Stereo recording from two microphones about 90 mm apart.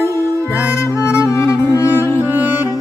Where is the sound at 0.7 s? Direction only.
30° left (ahead or behind).